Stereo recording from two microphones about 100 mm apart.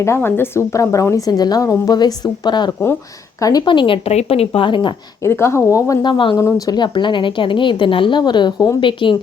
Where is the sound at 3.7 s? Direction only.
55° left (ahead or behind).